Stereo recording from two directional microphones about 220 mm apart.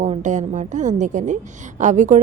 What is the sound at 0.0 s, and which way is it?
A woman's voice, 35° right (ahead or behind).